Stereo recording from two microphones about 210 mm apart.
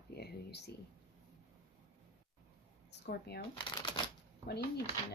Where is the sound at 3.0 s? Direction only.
50° left (ahead or behind).